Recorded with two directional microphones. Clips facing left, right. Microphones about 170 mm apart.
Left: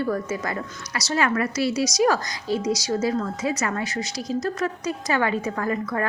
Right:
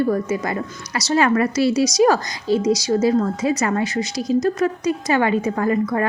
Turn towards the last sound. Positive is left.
turn(degrees=-25)  # may be behind; listen again after turning